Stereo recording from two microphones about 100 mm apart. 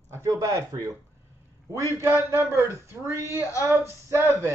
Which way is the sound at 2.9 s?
25° right (ahead or behind).